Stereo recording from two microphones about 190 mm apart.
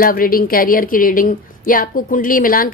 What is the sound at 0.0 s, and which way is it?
A woman's voice, 50° left (ahead or behind).